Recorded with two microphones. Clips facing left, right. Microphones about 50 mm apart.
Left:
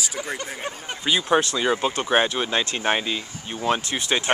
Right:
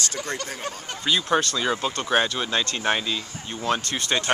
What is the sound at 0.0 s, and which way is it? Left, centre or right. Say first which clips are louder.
Speech: even; centre.